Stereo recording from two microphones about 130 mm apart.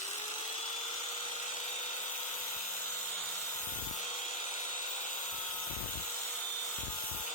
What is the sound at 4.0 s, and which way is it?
Tools, 70° left (ahead or behind).